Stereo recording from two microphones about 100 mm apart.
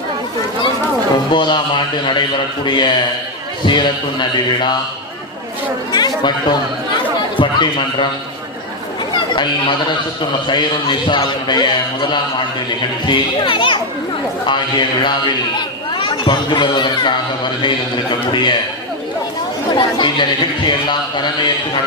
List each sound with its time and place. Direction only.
1.3 s speech: 50° left (ahead or behind)
5.9 s chatter: 45° left (ahead or behind)
7.3 s speech: 55° left (ahead or behind)
9.1 s chatter: 50° left (ahead or behind)
10.4 s speech: 50° left (ahead or behind)
18.3 s speech: 50° left (ahead or behind)
19.7 s speech: 55° left (ahead or behind)